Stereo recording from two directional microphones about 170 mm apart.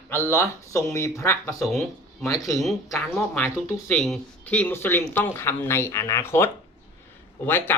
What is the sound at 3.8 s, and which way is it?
Speech, centre (ahead or behind).